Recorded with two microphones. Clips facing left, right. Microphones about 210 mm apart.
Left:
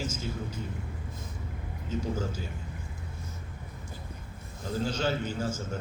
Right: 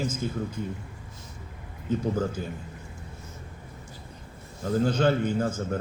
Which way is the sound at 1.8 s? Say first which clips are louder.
Right 6 dB; 55° right (ahead or behind).